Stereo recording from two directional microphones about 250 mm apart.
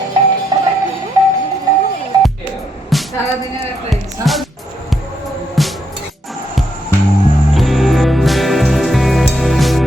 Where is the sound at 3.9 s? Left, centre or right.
Centre.